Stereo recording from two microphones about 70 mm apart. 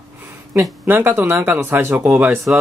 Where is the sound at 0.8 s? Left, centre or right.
Right.